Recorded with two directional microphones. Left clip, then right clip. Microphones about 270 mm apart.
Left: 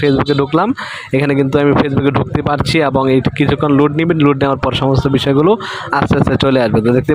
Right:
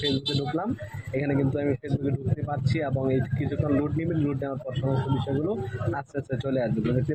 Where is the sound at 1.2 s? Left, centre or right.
Left.